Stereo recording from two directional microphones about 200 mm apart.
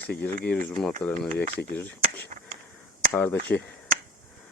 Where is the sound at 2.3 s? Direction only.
40° right (ahead or behind).